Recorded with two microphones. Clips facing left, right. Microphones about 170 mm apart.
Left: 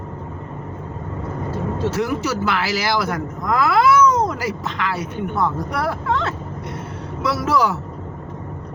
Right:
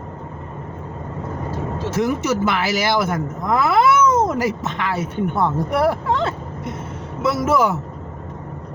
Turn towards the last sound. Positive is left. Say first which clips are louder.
# right 2 dB
turn(degrees=-20)  # may be behind; listen again after turning